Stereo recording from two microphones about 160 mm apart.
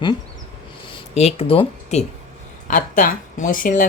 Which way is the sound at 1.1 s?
40° left (ahead or behind).